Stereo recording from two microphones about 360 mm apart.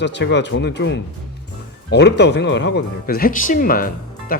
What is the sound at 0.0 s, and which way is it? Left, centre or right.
Speech, left.